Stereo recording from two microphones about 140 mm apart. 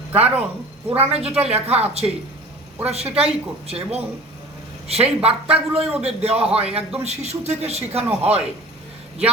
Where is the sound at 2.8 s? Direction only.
45° right (ahead or behind).